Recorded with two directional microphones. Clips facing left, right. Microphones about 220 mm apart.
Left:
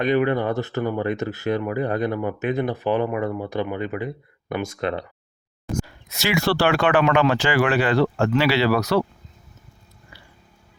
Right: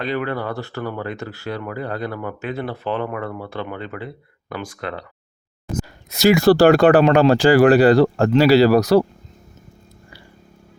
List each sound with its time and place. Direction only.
0.0 s speech: 20° left (ahead or behind)
6.1 s speech: 40° right (ahead or behind)